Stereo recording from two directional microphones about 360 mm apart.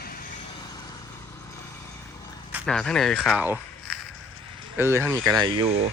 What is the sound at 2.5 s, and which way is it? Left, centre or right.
Speech, centre.